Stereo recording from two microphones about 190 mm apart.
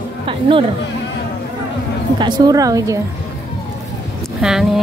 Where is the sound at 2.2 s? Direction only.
20° right (ahead or behind).